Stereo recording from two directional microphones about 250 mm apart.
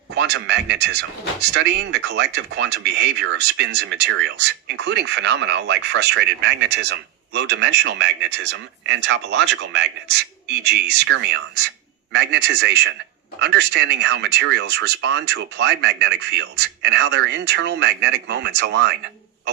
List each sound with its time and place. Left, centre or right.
0.2 s speech: right